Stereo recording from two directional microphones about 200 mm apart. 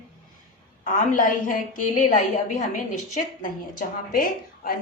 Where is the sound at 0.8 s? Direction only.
40° left (ahead or behind).